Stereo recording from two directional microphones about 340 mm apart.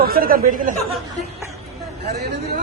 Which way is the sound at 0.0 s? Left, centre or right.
Right.